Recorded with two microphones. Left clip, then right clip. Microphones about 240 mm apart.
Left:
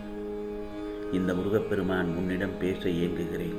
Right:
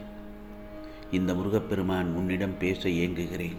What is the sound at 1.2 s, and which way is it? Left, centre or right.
Speech, right.